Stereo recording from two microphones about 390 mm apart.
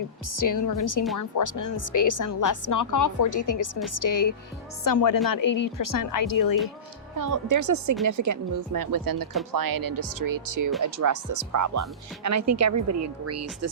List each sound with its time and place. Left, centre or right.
0.3 s a woman's voice: left
7.2 s speech: right